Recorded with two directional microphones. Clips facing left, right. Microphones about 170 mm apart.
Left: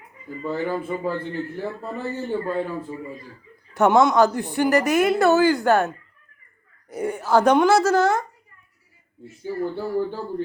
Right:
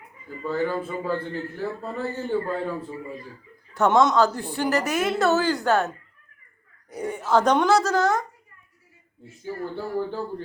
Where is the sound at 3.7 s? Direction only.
10° left (ahead or behind).